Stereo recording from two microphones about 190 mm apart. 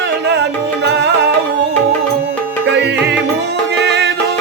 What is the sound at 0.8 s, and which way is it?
Music, 65° right (ahead or behind).